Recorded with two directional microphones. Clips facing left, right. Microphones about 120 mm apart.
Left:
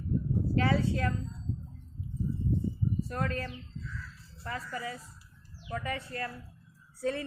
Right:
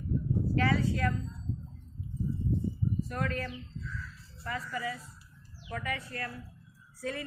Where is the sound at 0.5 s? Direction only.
25° left (ahead or behind).